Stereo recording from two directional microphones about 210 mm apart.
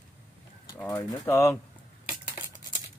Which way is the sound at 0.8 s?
15° left (ahead or behind).